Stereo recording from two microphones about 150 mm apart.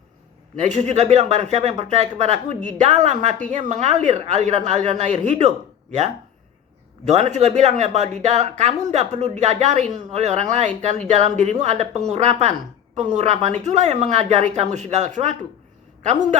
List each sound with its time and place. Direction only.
0.6 s speech: 50° right (ahead or behind)